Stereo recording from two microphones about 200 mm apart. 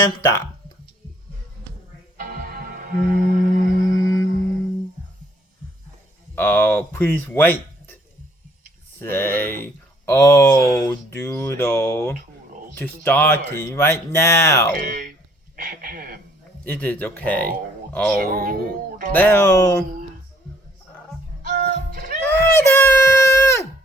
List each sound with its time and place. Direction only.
0.0 s speech: 15° left (ahead or behind)
2.1 s music: 45° right (ahead or behind)
6.3 s speech: 10° left (ahead or behind)
9.0 s speech: 10° left (ahead or behind)
14.8 s speech: 45° right (ahead or behind)
16.6 s speech: 10° left (ahead or behind)
18.2 s speech: 45° right (ahead or behind)
19.1 s speech: 10° left (ahead or behind)
21.5 s music: 45° right (ahead or behind)
22.2 s screaming: 10° left (ahead or behind)